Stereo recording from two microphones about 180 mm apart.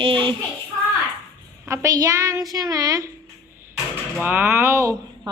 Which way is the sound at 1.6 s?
15° right (ahead or behind).